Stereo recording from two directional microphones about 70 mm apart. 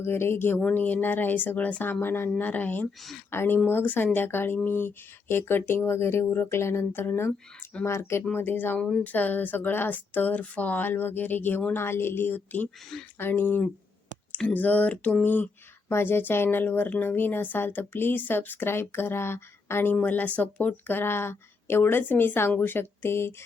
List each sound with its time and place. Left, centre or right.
0.0 s speech: left
8.3 s speech: left